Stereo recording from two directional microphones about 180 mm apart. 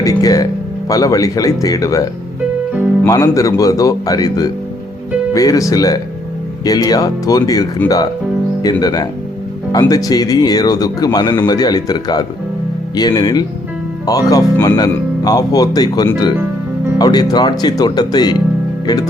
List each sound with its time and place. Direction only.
0.0 s speech: 20° left (ahead or behind)
3.1 s speech: 20° left (ahead or behind)